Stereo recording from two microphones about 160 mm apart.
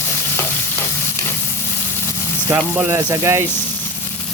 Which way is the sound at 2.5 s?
15° right (ahead or behind).